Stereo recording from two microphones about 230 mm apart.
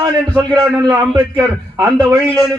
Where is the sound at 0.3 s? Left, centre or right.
Centre.